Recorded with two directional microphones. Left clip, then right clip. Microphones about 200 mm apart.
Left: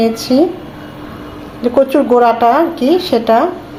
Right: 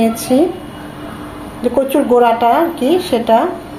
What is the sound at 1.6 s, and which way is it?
A woman's voice, 20° left (ahead or behind).